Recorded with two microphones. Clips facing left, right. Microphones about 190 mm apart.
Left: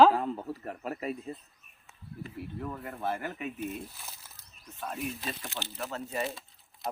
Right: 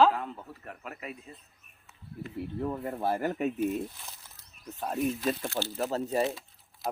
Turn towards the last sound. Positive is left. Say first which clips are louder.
# right 2 dB
turn(degrees=0)  # may be behind; listen again after turning